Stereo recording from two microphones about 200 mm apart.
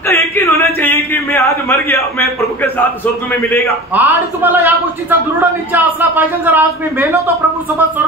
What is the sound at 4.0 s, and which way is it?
A man's voice, 10° right (ahead or behind).